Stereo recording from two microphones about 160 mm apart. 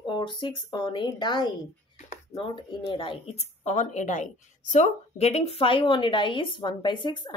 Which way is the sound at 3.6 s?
50° left (ahead or behind).